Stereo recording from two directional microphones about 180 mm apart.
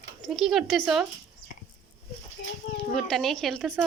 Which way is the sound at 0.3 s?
Centre (ahead or behind).